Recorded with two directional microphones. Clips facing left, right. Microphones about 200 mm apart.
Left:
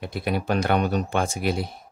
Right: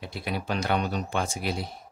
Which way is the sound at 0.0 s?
55° left (ahead or behind).